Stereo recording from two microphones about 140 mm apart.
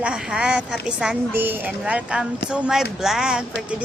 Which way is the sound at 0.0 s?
5° right (ahead or behind).